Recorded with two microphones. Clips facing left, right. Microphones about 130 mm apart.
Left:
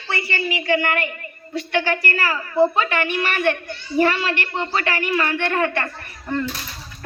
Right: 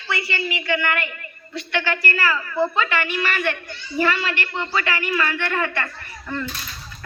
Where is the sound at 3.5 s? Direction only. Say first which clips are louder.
Left 5 dB; 45° left (ahead or behind).